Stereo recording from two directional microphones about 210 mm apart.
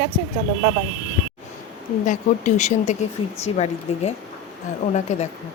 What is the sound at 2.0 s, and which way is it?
A woman's voice, 35° left (ahead or behind).